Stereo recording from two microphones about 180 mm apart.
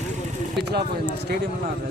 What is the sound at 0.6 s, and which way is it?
Speech, 65° right (ahead or behind).